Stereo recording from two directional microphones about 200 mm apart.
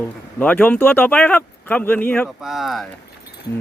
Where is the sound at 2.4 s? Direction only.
Centre (ahead or behind).